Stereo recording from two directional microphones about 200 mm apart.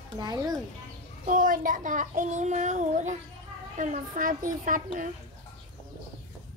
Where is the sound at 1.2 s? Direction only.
40° right (ahead or behind).